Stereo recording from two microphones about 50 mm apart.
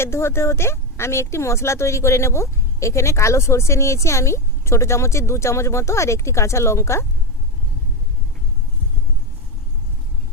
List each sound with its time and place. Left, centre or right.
0.0 s speech: left